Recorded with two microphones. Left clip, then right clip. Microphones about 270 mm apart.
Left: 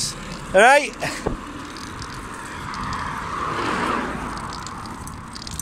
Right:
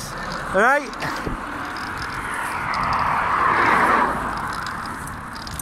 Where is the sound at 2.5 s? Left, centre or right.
Centre.